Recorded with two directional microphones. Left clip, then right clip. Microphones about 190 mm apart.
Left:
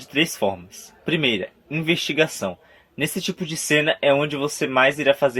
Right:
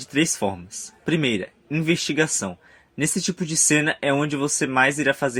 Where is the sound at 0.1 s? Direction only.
45° right (ahead or behind).